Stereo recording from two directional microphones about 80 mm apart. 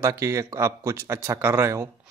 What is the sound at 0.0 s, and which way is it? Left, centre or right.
Speech, right.